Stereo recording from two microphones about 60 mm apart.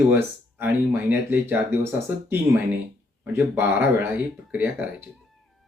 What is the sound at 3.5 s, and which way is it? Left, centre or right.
Speech, right.